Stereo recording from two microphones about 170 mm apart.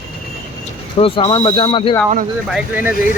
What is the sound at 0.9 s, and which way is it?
Speech, 35° left (ahead or behind).